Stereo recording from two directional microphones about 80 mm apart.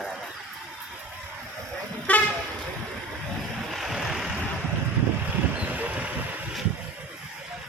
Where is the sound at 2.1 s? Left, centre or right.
Centre.